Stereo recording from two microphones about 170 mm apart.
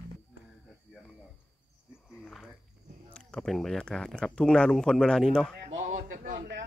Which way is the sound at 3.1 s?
5° left (ahead or behind).